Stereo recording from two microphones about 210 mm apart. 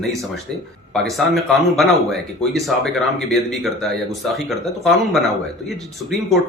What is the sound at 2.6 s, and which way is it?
Speech, centre (ahead or behind).